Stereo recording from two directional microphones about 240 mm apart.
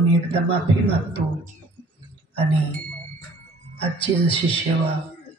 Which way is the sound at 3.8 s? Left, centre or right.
Left.